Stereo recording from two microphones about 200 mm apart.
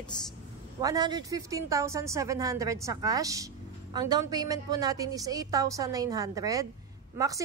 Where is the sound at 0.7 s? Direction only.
20° right (ahead or behind).